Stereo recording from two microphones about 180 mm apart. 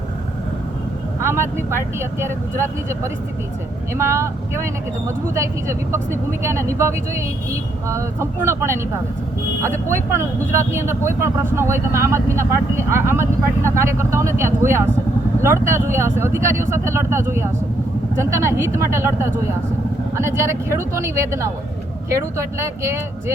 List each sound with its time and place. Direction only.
1.2 s speech: 15° right (ahead or behind)